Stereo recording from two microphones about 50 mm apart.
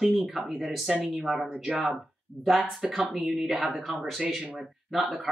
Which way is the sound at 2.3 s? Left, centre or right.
Right.